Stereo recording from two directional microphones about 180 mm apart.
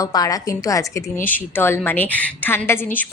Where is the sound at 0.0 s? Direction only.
20° left (ahead or behind).